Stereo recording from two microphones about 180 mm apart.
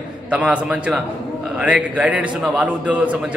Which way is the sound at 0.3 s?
5° right (ahead or behind).